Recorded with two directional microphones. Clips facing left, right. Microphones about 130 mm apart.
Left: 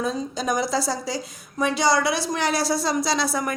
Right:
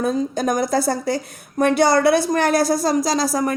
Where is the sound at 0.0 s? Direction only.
55° right (ahead or behind).